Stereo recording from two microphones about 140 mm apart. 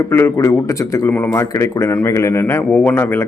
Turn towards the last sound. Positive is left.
turn(degrees=15)  # may be behind; listen again after turning